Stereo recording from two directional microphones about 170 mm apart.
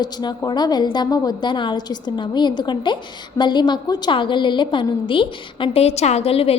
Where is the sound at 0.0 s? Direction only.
25° left (ahead or behind).